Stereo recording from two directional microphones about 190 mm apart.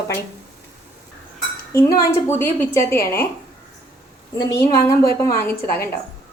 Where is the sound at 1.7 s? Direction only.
15° left (ahead or behind).